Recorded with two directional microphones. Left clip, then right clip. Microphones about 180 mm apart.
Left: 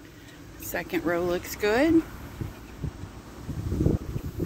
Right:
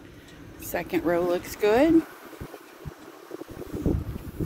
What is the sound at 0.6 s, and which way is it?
Speech, 10° right (ahead or behind).